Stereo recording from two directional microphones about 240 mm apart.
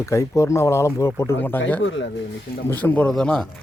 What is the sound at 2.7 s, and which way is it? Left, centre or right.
Speech, centre.